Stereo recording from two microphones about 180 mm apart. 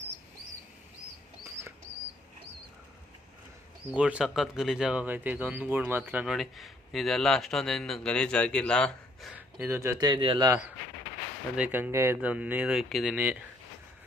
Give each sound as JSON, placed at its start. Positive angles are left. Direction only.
{"t": 3.8, "sound": "speech", "side_deg": -5}
{"t": 9.3, "sound": "speech", "side_deg": -10}
{"t": 11.5, "sound": "speech", "side_deg": -10}